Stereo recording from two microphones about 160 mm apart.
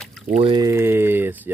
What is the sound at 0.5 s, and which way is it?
Speech, 20° right (ahead or behind).